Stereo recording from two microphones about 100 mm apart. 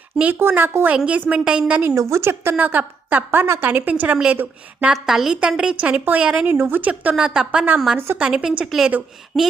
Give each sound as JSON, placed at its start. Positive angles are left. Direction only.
{"t": 0.2, "sound": "a woman's voice", "side_deg": -20}
{"t": 2.0, "sound": "a woman's voice", "side_deg": -30}
{"t": 6.5, "sound": "a woman's voice", "side_deg": -20}
{"t": 7.9, "sound": "a woman's voice", "side_deg": -25}
{"t": 8.2, "sound": "speech", "side_deg": -5}